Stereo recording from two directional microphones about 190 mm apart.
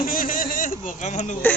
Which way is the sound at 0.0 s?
45° left (ahead or behind).